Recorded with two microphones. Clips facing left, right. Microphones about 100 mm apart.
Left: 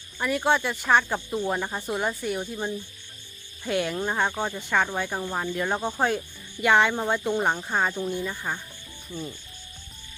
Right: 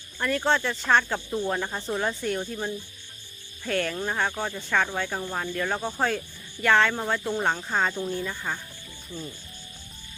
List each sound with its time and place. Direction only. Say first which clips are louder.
0.2 s speech: left 1 dB; 10° left (ahead or behind)
3.6 s speech: left 1 dB; 15° left (ahead or behind)